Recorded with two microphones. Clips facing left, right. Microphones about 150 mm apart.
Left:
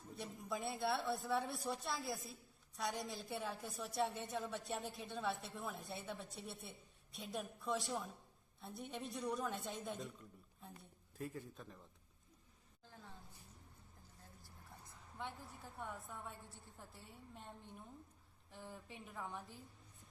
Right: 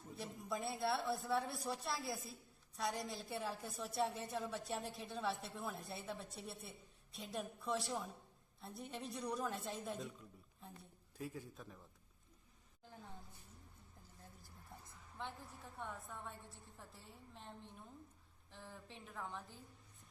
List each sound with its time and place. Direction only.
0.1 s speech: centre (ahead or behind)
12.8 s a sound: 15° right (ahead or behind)
15.8 s speech: 5° left (ahead or behind)
18.7 s a woman's voice: 5° left (ahead or behind)